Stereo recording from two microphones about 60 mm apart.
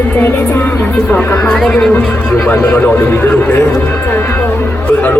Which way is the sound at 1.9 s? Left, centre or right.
Left.